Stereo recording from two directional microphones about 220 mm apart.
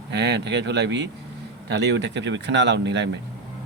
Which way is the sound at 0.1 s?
50° right (ahead or behind).